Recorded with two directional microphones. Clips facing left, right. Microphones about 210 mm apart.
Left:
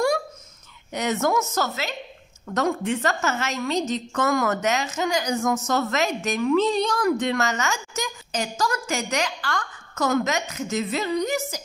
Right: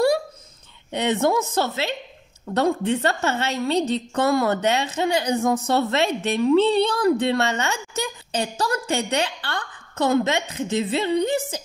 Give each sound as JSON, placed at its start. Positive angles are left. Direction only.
{"t": 0.9, "sound": "a woman's voice", "side_deg": -30}